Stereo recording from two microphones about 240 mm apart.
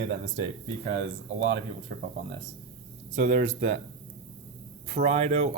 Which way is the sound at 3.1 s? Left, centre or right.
Right.